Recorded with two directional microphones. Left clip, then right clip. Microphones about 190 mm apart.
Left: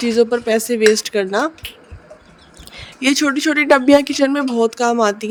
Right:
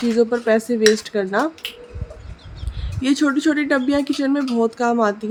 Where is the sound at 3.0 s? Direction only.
35° left (ahead or behind).